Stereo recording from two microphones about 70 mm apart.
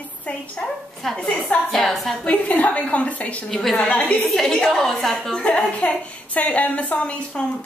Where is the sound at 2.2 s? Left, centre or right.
Left.